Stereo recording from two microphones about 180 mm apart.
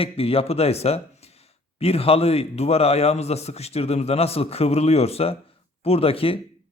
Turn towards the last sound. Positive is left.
turn(degrees=30)  # may be behind; listen again after turning